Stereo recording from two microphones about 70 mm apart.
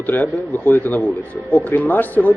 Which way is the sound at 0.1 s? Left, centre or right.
Left.